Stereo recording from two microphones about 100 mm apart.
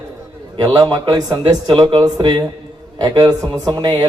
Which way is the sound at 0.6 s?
45° right (ahead or behind).